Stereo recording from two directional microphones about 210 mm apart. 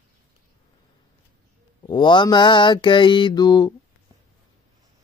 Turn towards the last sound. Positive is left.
turn(degrees=20)  # may be behind; listen again after turning